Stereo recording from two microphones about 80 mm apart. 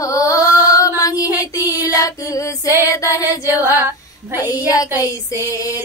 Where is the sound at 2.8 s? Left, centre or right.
Left.